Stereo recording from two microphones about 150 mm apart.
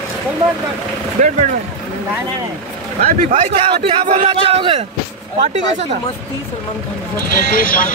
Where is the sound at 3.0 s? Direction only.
45° right (ahead or behind).